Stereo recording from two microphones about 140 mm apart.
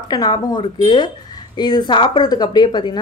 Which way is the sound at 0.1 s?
30° left (ahead or behind).